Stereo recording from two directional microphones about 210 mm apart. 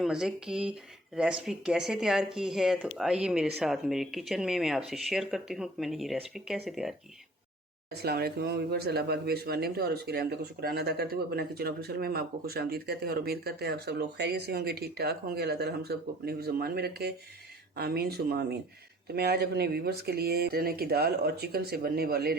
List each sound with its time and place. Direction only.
0.0 s speech: centre (ahead or behind)
7.9 s speech: 50° right (ahead or behind)